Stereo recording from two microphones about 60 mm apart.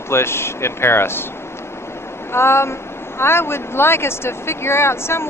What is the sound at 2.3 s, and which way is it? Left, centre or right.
Speech, left.